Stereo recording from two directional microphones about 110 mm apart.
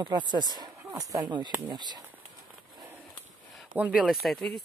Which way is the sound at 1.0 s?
30° right (ahead or behind).